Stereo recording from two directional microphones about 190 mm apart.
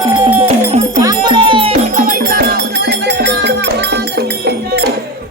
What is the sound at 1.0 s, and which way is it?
Music, 20° right (ahead or behind).